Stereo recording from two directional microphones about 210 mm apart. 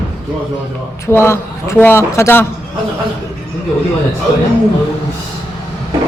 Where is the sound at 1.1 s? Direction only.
10° left (ahead or behind).